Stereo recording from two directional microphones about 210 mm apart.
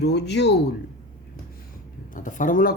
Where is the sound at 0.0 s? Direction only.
55° left (ahead or behind).